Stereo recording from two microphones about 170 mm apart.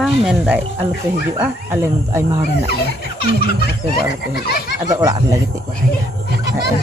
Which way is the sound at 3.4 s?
65° left (ahead or behind).